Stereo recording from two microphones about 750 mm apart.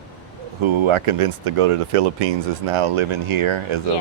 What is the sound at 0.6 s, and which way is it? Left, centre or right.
Speech, right.